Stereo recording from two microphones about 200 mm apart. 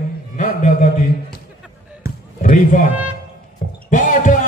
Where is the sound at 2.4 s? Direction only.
40° left (ahead or behind).